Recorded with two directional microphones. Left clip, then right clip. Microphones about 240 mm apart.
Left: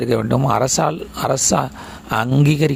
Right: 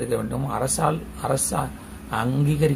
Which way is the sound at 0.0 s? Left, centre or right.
Left.